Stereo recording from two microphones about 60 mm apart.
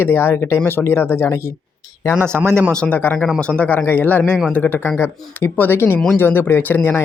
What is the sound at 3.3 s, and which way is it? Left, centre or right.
Speech, centre.